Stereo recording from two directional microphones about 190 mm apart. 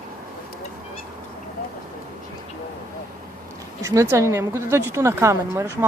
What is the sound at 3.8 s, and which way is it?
Speech, 15° right (ahead or behind).